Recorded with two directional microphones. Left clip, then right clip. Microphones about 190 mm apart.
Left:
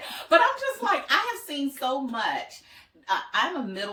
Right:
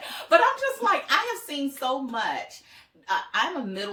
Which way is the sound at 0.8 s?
15° right (ahead or behind).